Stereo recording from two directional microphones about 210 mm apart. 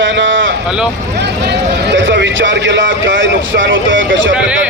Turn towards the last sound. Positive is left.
turn(degrees=-65)  # may be behind; listen again after turning